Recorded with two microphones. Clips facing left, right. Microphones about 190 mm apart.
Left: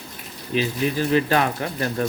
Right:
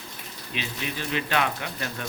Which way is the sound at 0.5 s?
40° left (ahead or behind).